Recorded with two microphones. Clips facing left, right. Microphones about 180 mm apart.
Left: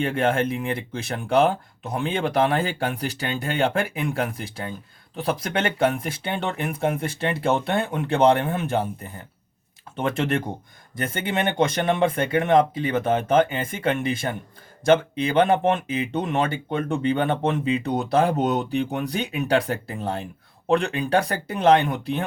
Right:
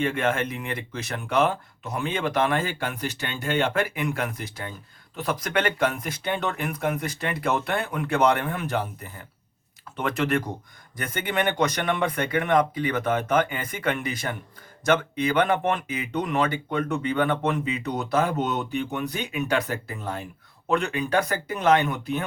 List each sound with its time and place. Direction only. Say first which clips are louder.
0.0 s speech: left 3 dB; 30° left (ahead or behind)
10.0 s speech: left 1 dB; 30° left (ahead or behind)